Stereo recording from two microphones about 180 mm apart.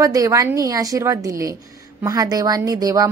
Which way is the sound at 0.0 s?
20° right (ahead or behind).